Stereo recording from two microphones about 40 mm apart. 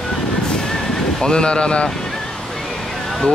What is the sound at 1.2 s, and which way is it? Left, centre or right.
Speech, left.